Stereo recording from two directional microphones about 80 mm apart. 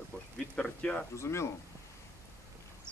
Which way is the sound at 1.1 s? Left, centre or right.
Left.